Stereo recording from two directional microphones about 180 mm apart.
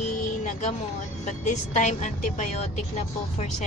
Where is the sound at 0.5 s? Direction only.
40° left (ahead or behind).